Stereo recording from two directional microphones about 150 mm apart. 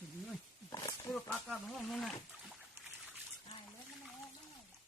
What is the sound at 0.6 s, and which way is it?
Wild animals, 25° left (ahead or behind).